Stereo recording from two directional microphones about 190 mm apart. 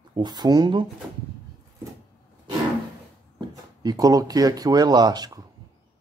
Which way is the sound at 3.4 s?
20° right (ahead or behind).